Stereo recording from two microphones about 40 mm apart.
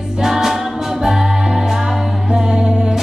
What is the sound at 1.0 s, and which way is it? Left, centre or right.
Music, centre.